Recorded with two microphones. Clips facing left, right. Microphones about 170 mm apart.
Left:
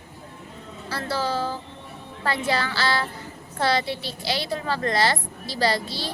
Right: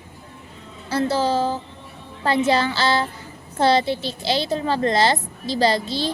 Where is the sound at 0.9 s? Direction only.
20° right (ahead or behind).